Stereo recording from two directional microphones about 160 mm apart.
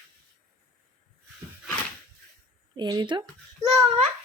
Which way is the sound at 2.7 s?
25° right (ahead or behind).